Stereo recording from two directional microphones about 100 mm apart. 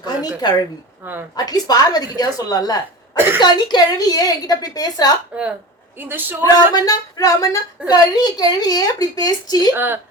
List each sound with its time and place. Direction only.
0.4 s a woman's voice: 40° left (ahead or behind)
1.0 s a woman's voice: 20° right (ahead or behind)
1.5 s a woman's voice: 40° left (ahead or behind)
5.3 s a woman's voice: 10° right (ahead or behind)
6.4 s a woman's voice: 40° left (ahead or behind)
9.7 s a woman's voice: 20° right (ahead or behind)